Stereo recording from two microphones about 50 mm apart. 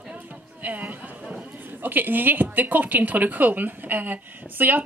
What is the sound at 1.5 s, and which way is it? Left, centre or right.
A woman's voice, right.